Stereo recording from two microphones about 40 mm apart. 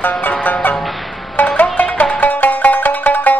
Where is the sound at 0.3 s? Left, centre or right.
Left.